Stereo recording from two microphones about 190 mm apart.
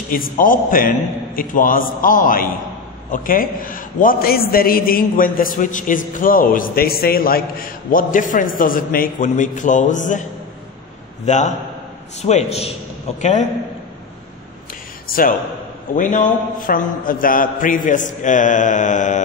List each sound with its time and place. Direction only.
0.1 s a man's voice: 45° left (ahead or behind)
11.2 s a man's voice: 40° left (ahead or behind)
15.1 s a man's voice: 50° left (ahead or behind)